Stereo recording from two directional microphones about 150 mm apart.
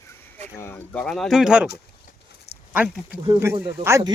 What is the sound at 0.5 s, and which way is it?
Speech, 15° left (ahead or behind).